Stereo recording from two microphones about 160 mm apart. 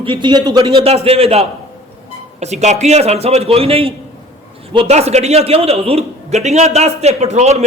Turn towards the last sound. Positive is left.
turn(degrees=-45)  # may be behind; listen again after turning